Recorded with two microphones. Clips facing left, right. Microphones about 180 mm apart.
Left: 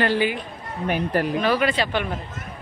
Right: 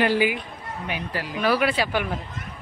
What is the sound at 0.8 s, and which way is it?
Speech, 50° left (ahead or behind).